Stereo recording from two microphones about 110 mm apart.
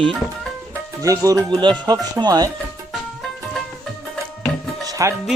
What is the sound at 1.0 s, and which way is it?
Music, 30° right (ahead or behind).